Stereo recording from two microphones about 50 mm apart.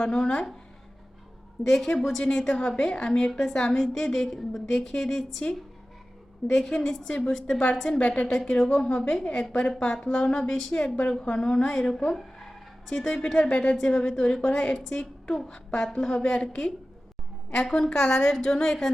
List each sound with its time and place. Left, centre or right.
0.0 s a woman's voice: centre
1.6 s a woman's voice: centre
3.3 s a woman's voice: centre
6.5 s a woman's voice: centre
12.1 s a sound: centre
13.7 s a woman's voice: centre